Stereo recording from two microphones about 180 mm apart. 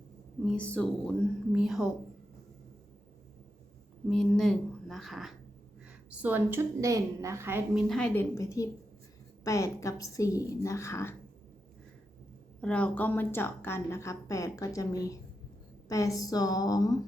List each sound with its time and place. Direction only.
0.4 s speech: 5° left (ahead or behind)
4.1 s a woman's voice: 5° left (ahead or behind); by 7.9 s 15° right (ahead or behind)
7.9 s speech: 5° left (ahead or behind)
12.6 s a woman's voice: 5° left (ahead or behind)